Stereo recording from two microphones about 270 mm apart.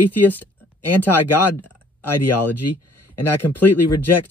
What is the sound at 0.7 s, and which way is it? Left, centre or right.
Speech, left.